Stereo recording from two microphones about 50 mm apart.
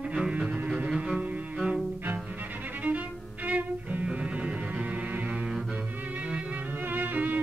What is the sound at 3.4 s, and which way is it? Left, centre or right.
Music, right.